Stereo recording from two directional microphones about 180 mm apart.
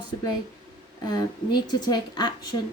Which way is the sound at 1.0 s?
20° left (ahead or behind).